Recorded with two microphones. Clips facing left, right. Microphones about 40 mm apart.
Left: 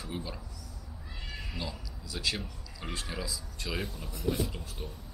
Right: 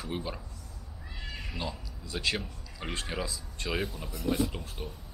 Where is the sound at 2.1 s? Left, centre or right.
Right.